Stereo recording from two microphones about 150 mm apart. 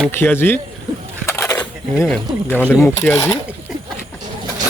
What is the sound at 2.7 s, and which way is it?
Speech, 15° left (ahead or behind).